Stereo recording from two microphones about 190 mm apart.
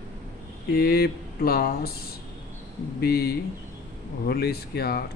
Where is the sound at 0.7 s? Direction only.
55° left (ahead or behind).